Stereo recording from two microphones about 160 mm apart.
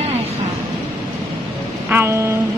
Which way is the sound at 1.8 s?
15° right (ahead or behind).